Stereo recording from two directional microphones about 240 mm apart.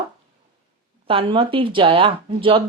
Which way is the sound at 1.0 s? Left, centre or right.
Right.